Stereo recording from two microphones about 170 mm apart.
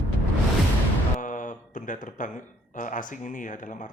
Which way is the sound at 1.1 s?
50° left (ahead or behind).